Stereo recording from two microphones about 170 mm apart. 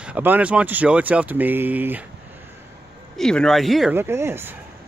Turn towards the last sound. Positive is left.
turn(degrees=-15)  # may be behind; listen again after turning